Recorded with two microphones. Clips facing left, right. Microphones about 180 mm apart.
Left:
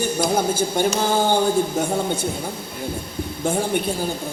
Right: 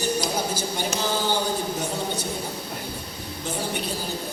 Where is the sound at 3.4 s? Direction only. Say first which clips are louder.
Left 9 dB; 50° left (ahead or behind).